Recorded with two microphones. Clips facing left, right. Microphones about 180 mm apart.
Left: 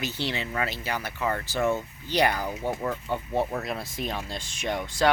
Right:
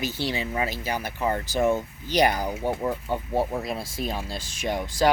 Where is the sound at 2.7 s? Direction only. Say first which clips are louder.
Right 2 dB; 15° right (ahead or behind).